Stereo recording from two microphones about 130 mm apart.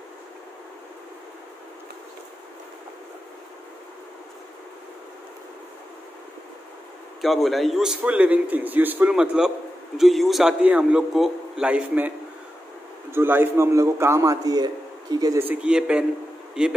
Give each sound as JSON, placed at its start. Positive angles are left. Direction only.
{"t": 7.2, "sound": "a man's voice", "side_deg": 0}
{"t": 13.1, "sound": "a man's voice", "side_deg": -15}
{"t": 15.3, "sound": "a man's voice", "side_deg": -15}